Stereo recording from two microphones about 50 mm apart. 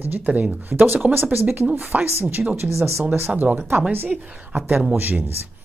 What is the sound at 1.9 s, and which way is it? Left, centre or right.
Speech, right.